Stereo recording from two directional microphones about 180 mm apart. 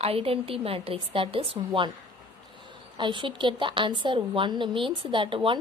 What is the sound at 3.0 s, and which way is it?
A woman's voice, 25° right (ahead or behind).